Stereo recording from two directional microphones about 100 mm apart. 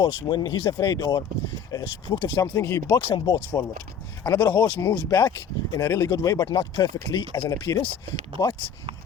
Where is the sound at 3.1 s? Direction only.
50° left (ahead or behind).